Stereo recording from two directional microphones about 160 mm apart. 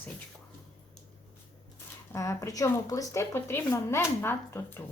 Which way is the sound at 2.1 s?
20° left (ahead or behind).